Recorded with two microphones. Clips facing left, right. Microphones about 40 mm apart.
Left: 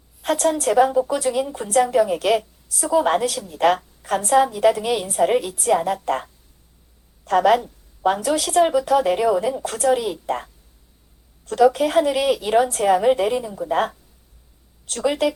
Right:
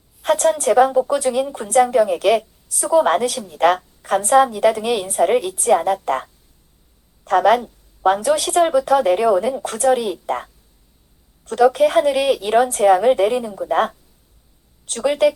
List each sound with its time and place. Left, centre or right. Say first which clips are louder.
0.2 s a woman's voice: right 3 dB; centre
3.2 s a woman's voice: right 2 dB; centre
7.3 s a woman's voice: right 2 dB; centre
8.4 s speech: right 1 dB; right
8.9 s speech: right 3 dB; centre
14.9 s speech: right 4 dB; centre